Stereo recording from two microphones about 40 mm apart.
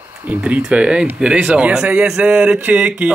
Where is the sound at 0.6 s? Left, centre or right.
Right.